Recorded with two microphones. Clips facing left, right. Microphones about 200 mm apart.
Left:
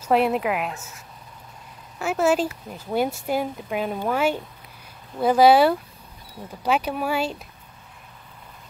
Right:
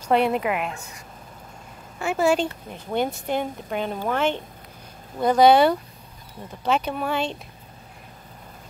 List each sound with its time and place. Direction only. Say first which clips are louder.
0.0 s a woman's voice: even; centre (ahead or behind)